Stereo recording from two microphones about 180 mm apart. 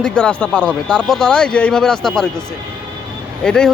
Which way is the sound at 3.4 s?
5° left (ahead or behind).